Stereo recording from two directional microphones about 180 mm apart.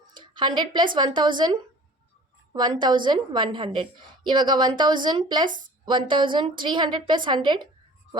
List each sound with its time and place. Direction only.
0.1 s a sound: 25° right (ahead or behind)
0.9 s a woman's voice: 25° right (ahead or behind)
5.5 s speech: 45° right (ahead or behind)
5.8 s a woman's voice: 25° right (ahead or behind)